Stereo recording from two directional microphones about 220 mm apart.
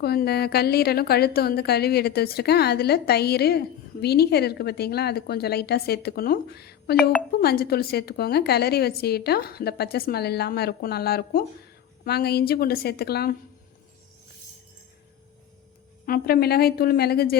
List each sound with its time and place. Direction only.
0.0 s a woman's voice: 45° left (ahead or behind)
16.0 s a woman's voice: 45° left (ahead or behind)